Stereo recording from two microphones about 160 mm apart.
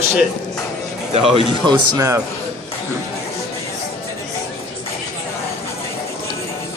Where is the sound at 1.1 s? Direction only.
30° right (ahead or behind).